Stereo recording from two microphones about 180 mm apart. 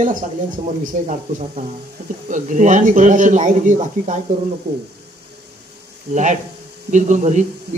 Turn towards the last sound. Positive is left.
turn(degrees=-40)  # may be behind; listen again after turning